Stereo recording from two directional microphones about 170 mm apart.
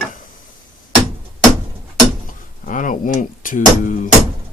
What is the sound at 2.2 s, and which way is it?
Speech, 50° left (ahead or behind).